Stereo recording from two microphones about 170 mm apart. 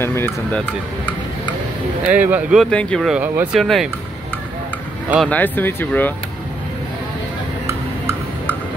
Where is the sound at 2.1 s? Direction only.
10° right (ahead or behind).